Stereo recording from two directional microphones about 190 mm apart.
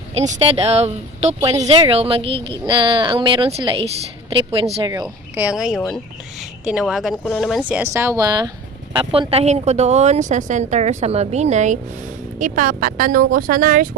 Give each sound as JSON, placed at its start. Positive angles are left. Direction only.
{"t": 0.2, "sound": "a woman's voice", "side_deg": -35}
{"t": 5.0, "sound": "a woman's voice", "side_deg": -5}